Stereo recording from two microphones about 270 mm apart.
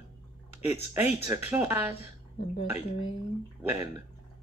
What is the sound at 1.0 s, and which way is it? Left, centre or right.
Speech, centre.